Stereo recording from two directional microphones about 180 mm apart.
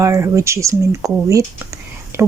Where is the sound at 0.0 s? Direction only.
15° right (ahead or behind).